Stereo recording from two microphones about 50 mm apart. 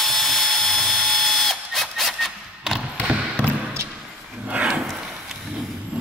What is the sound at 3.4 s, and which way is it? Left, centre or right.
Trickle, centre.